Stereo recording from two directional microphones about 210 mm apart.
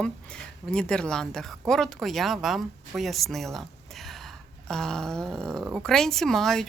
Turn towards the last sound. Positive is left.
turn(degrees=0)  # may be behind; listen again after turning